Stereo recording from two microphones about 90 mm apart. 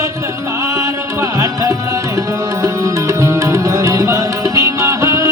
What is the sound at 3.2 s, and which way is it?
Music, 35° right (ahead or behind).